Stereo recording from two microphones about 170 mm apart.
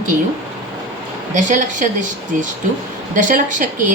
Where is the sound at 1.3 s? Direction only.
50° right (ahead or behind).